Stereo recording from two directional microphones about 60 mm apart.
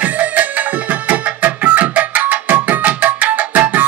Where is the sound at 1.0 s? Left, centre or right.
Right.